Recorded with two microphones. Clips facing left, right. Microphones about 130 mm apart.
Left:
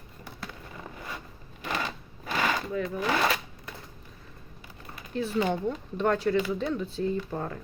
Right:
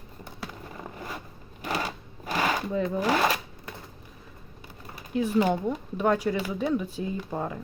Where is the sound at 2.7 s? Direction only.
25° right (ahead or behind).